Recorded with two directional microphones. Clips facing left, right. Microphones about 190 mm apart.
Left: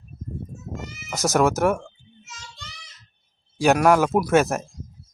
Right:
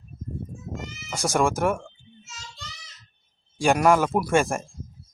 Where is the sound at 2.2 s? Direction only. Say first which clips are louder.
Even; 60° left (ahead or behind).